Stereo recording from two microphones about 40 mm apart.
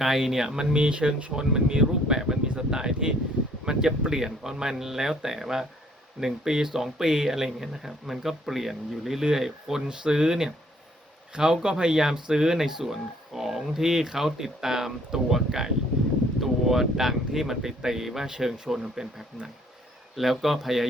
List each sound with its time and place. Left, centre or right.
0.0 s speech: centre
20.1 s speech: centre